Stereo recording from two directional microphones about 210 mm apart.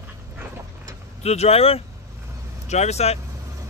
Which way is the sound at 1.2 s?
30° left (ahead or behind).